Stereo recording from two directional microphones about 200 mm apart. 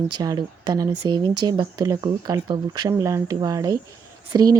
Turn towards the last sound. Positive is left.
turn(degrees=-20)  # may be behind; listen again after turning